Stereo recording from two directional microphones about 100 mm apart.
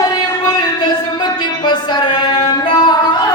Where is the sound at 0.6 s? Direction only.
45° left (ahead or behind).